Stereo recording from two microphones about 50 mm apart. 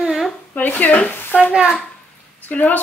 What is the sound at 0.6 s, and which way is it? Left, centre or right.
Speech, left.